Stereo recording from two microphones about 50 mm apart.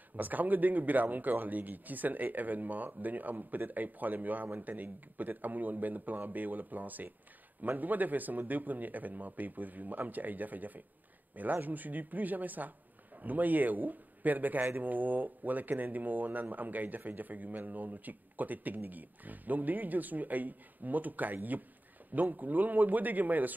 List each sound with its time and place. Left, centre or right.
0.1 s speech: right